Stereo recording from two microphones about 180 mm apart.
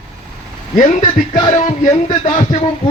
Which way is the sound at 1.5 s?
40° left (ahead or behind).